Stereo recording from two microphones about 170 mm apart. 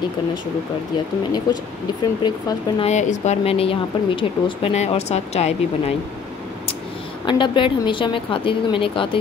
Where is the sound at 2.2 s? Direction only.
25° left (ahead or behind).